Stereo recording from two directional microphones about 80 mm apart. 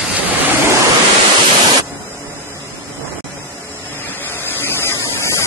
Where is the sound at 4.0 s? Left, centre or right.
Left.